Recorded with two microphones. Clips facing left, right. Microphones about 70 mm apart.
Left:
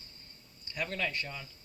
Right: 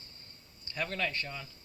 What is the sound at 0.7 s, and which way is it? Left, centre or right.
Speech, centre.